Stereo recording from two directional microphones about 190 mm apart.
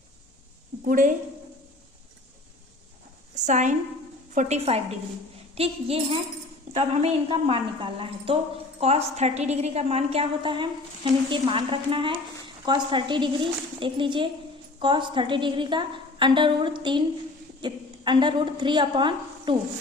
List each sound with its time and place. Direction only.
0.9 s a woman's voice: 45° right (ahead or behind)
3.3 s a woman's voice: 40° right (ahead or behind)